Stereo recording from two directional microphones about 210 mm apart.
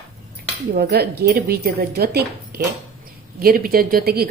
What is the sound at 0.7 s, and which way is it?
Speech, 50° right (ahead or behind).